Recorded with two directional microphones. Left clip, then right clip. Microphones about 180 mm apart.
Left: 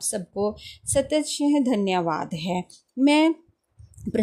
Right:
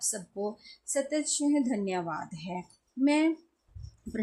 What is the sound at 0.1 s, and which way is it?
Speech, 40° left (ahead or behind).